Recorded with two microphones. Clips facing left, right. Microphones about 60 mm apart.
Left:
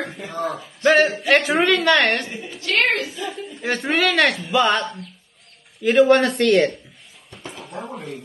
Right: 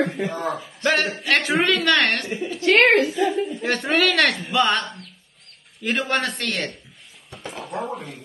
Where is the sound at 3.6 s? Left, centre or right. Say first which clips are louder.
Left 3 dB; centre.